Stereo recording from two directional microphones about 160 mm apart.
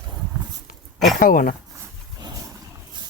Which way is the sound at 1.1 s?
60° left (ahead or behind).